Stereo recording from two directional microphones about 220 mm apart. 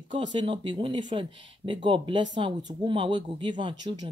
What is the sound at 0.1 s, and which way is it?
Speech, 20° right (ahead or behind).